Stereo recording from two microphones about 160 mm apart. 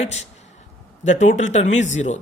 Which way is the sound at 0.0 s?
45° left (ahead or behind).